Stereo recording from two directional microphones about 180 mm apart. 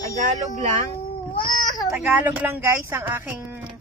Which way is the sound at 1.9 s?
10° right (ahead or behind).